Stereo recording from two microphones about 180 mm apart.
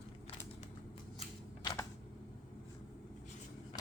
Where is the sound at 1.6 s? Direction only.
20° left (ahead or behind).